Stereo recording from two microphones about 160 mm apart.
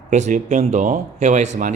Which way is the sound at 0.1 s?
50° right (ahead or behind).